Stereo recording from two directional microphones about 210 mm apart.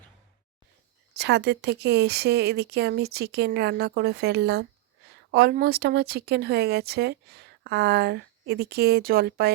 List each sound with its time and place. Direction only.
1.2 s speech: 55° right (ahead or behind)